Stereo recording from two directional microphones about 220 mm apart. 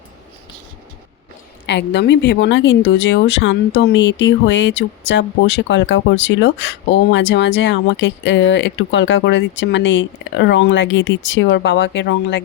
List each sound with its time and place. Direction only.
1.6 s a woman's voice: 50° left (ahead or behind)